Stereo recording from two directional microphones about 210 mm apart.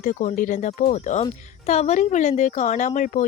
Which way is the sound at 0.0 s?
35° left (ahead or behind).